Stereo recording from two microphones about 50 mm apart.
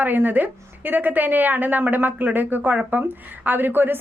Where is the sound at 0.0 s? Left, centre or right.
Right.